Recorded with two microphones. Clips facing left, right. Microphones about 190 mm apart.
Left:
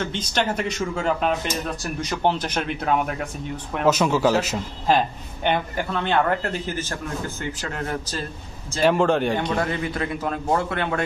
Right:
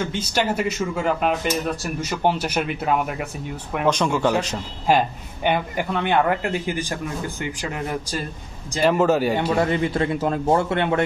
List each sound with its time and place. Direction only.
0.0 s a man's voice: 10° right (ahead or behind)
4.8 s a man's voice: 10° right (ahead or behind)
9.6 s a man's voice: 25° right (ahead or behind)